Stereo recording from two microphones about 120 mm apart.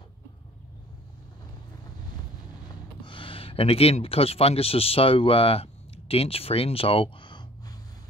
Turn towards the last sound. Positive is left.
turn(degrees=35)  # may be behind; listen again after turning